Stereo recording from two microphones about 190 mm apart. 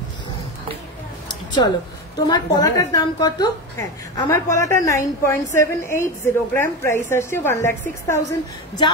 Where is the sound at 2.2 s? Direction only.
20° left (ahead or behind).